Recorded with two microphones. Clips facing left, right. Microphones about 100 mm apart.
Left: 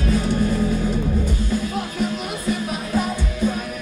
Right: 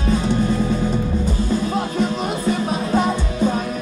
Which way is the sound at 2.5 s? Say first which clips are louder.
Right 3 dB; 30° right (ahead or behind).